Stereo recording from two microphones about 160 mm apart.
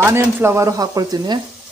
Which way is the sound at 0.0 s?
15° right (ahead or behind).